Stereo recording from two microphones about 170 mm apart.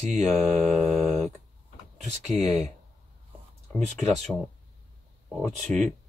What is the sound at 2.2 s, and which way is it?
Speech, 40° right (ahead or behind).